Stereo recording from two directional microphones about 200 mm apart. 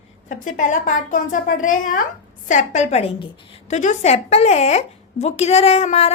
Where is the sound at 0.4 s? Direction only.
40° left (ahead or behind).